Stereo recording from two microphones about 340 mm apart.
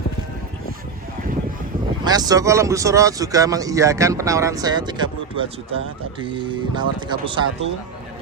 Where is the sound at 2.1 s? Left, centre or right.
Centre.